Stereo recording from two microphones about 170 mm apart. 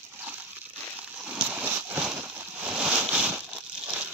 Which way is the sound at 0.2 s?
10° right (ahead or behind).